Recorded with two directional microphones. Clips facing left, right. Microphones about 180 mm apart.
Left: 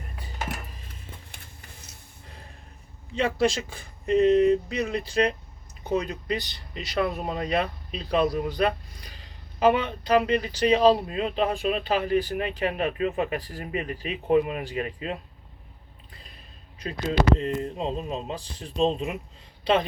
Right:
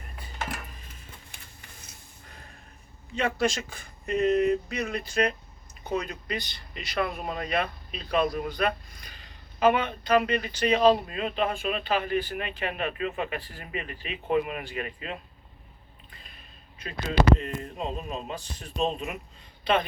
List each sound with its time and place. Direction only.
2.2 s a sound: 30° left (ahead or behind)
3.2 s speech: 30° left (ahead or behind)
16.8 s speech: 35° left (ahead or behind)